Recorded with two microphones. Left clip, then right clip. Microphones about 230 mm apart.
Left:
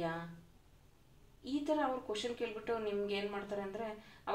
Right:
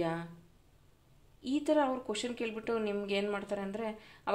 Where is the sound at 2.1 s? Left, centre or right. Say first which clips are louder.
Right 2 dB; right.